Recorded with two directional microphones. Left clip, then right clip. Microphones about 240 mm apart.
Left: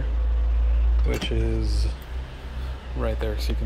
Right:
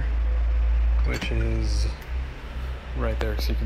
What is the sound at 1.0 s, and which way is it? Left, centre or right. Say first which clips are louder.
Speech: left 2 dB; centre.